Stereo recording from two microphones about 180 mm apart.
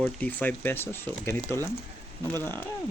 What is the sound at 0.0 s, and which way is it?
Speech, 10° left (ahead or behind).